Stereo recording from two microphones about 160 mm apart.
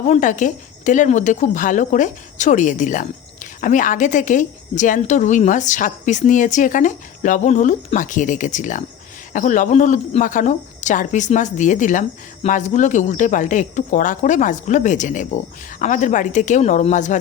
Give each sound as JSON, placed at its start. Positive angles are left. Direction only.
{"t": 0.1, "sound": "speech", "side_deg": 50}